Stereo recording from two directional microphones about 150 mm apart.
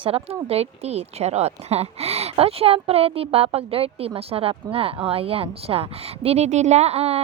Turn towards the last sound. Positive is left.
turn(degrees=-45)  # may be behind; listen again after turning